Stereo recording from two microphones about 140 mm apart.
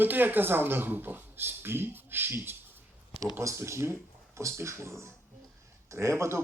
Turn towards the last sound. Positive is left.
turn(degrees=-20)  # may be behind; listen again after turning